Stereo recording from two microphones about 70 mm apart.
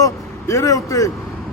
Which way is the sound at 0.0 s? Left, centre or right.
Left.